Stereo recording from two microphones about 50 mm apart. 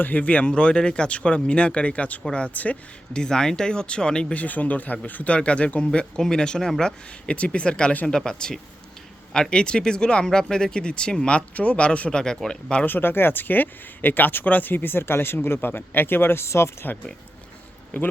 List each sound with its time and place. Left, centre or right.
0.0 s speech: left
3.1 s speech: centre
4.4 s speech: left; by 6.9 s centre
7.3 s speech: left
12.8 s speech: left
16.5 s speech: left
17.9 s speech: left